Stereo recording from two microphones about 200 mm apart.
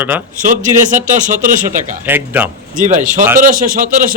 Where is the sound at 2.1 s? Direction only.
10° right (ahead or behind).